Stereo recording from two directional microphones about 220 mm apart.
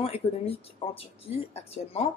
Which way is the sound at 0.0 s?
25° left (ahead or behind).